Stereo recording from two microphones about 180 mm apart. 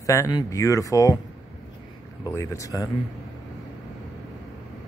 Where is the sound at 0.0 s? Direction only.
15° left (ahead or behind).